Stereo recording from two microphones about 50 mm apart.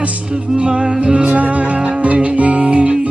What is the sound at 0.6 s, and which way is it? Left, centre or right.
Music, right.